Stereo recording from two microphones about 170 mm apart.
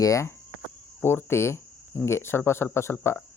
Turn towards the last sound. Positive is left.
turn(degrees=15)  # may be behind; listen again after turning